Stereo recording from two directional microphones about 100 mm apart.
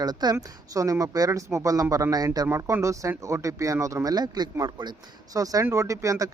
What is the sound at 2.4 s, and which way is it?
Speech, 25° right (ahead or behind).